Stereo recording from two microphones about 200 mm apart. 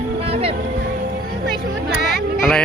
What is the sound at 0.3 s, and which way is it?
Music, 30° right (ahead or behind).